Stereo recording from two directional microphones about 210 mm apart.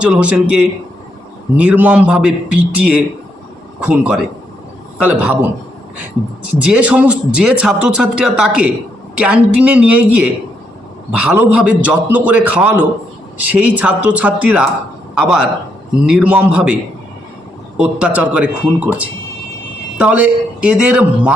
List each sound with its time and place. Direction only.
0.0 s a man's voice: 5° right (ahead or behind)
6.6 s a man's voice: 5° right (ahead or behind)
17.7 s a man's voice: 5° right (ahead or behind)